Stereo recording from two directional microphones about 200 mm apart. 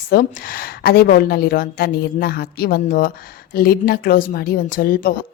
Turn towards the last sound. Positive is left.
turn(degrees=45)  # may be behind; listen again after turning